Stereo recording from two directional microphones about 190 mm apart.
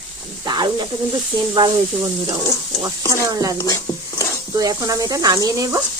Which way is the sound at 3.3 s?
20° right (ahead or behind).